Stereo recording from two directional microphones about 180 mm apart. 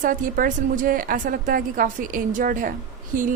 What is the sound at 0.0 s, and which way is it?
A woman's voice, 50° right (ahead or behind).